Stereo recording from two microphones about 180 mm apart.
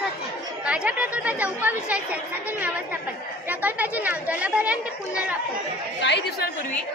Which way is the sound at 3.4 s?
10° right (ahead or behind).